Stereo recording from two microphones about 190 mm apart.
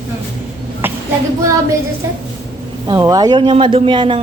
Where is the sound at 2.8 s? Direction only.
20° right (ahead or behind).